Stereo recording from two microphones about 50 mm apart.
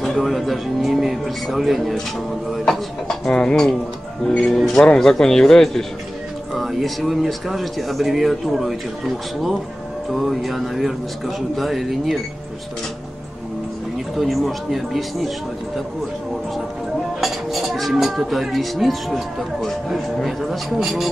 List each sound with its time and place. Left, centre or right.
0.0 s speech: centre
3.3 s speech: centre
4.5 s speech: centre
14.1 s speech: centre
17.2 s speech: centre